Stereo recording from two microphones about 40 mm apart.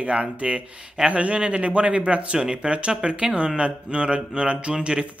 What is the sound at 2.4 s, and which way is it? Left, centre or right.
Speech, centre.